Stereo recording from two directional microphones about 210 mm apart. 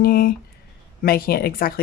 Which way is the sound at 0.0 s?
45° left (ahead or behind).